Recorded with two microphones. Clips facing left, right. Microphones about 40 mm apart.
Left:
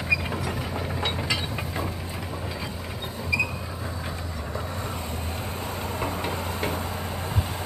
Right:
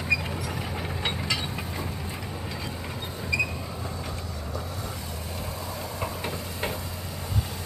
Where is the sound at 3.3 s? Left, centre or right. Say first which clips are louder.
Left 1 dB; centre.